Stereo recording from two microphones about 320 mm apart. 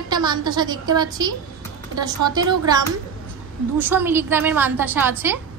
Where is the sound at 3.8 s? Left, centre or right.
Centre.